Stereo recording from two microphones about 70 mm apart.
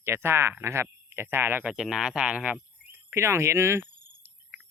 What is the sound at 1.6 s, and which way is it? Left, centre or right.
Speech, centre.